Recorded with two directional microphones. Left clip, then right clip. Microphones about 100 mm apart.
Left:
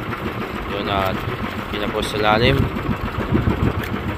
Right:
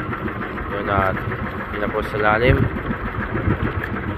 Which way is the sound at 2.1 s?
75° left (ahead or behind).